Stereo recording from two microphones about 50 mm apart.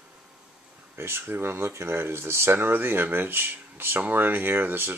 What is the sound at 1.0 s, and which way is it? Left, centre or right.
Speech, right.